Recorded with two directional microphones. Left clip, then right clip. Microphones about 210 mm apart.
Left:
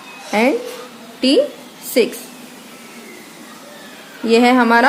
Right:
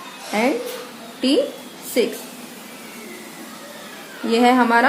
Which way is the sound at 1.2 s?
50° left (ahead or behind).